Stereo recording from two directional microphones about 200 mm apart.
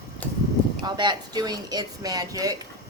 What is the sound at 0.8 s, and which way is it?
Speech, 20° right (ahead or behind).